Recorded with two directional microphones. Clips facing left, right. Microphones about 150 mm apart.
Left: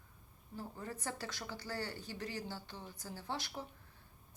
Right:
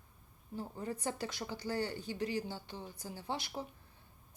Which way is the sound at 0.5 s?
20° right (ahead or behind).